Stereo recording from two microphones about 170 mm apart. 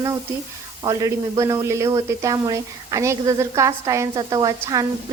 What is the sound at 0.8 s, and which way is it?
Speech, 20° right (ahead or behind).